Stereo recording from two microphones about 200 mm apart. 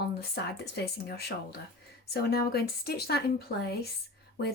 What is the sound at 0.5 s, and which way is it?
A woman's voice, 55° left (ahead or behind).